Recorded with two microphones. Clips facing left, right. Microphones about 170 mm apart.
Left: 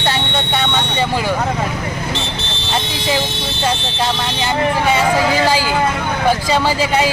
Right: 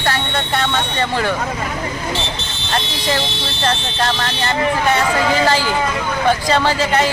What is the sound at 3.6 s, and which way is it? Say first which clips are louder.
Speech: even; 10° left (ahead or behind).